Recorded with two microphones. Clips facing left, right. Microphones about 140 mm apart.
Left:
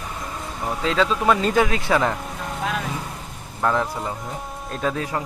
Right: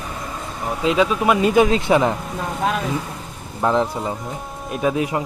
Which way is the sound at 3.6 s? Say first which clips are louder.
Right 3 dB; 20° right (ahead or behind).